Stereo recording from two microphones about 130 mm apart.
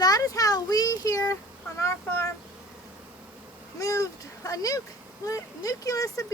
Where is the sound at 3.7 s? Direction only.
25° left (ahead or behind).